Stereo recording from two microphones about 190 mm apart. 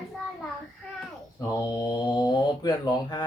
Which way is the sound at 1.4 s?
20° left (ahead or behind).